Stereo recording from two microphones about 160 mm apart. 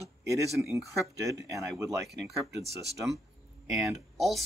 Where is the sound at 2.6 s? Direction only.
90° right.